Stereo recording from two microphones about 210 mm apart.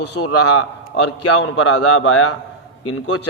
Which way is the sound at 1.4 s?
90° left.